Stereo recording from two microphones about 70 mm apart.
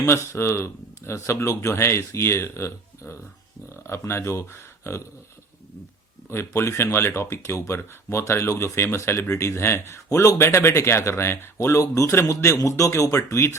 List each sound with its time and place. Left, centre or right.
0.0 s speech: left
6.3 s speech: left
11.5 s speech: left